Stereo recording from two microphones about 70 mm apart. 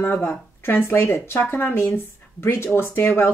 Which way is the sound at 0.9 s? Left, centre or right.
Left.